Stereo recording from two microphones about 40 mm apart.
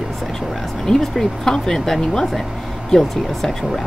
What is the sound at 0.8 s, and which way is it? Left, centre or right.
Speech, centre.